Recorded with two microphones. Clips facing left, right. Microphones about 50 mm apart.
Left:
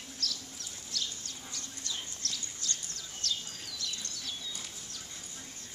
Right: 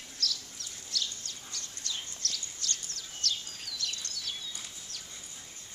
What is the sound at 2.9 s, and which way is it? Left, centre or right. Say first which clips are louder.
Bird: right 1 dB; right.